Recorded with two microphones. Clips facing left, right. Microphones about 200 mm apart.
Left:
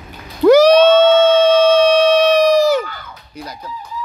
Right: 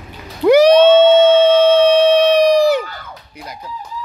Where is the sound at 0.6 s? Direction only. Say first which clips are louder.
Right 1 dB; 55° right (ahead or behind).